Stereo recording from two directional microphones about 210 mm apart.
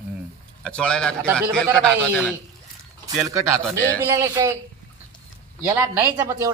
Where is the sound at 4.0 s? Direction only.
10° right (ahead or behind).